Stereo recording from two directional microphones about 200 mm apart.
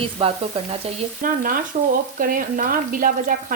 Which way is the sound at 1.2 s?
45° right (ahead or behind).